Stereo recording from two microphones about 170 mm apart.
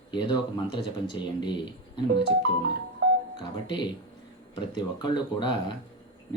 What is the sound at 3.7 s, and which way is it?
Speech, 25° left (ahead or behind).